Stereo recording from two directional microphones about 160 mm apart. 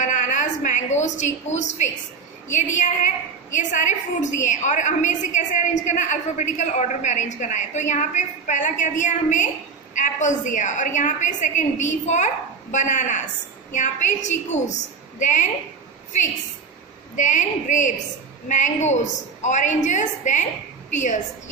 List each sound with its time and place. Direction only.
0.0 s a woman's voice: 50° left (ahead or behind)
17.1 s a woman's voice: 50° left (ahead or behind)